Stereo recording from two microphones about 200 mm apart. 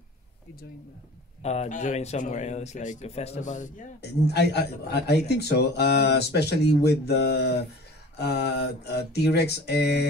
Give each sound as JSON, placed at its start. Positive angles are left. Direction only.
{"t": 1.4, "sound": "speech", "side_deg": 35}
{"t": 4.0, "sound": "a man's voice", "side_deg": 55}